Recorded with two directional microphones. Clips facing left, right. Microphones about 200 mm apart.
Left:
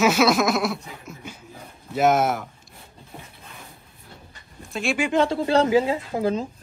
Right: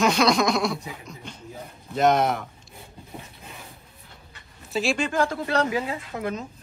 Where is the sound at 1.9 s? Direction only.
5° left (ahead or behind).